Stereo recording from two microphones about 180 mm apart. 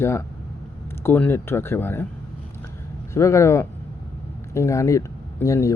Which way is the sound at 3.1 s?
15° left (ahead or behind).